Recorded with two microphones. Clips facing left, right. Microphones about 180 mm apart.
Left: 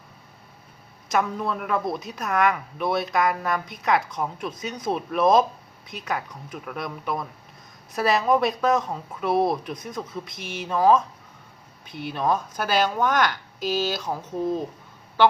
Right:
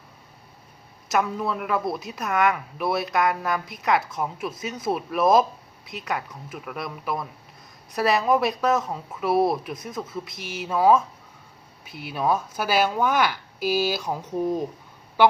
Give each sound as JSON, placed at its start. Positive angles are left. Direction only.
{"t": 1.0, "sound": "a woman's voice", "side_deg": -5}
{"t": 15.2, "sound": "honk", "side_deg": -10}